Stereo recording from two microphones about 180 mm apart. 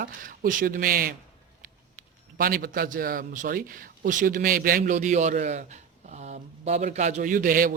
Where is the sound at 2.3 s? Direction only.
55° right (ahead or behind).